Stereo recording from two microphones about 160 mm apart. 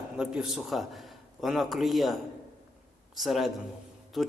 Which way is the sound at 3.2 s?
Centre (ahead or behind).